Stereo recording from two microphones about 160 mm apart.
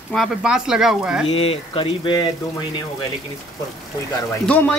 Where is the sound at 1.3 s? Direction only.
35° left (ahead or behind).